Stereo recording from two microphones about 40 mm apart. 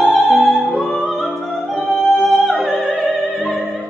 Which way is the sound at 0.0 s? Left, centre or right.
Centre.